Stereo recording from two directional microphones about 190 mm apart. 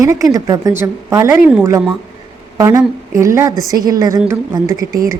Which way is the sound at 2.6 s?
15° right (ahead or behind).